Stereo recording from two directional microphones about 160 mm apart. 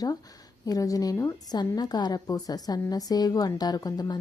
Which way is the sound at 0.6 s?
20° left (ahead or behind).